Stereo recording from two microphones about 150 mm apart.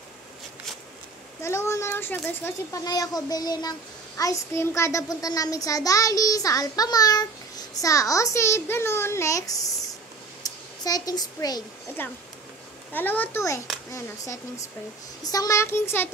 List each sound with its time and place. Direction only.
1.4 s a child's voice: 20° left (ahead or behind)
10.4 s a sound: 25° left (ahead or behind)
12.9 s speech: 10° left (ahead or behind)
15.2 s speech: 25° left (ahead or behind)